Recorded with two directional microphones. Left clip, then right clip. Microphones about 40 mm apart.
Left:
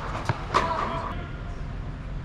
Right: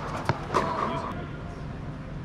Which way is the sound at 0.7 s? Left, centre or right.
Right.